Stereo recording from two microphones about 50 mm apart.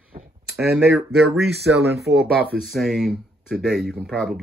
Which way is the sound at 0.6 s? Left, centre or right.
Centre.